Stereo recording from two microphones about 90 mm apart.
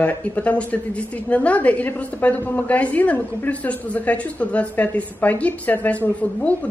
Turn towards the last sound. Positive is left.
turn(degrees=15)  # may be behind; listen again after turning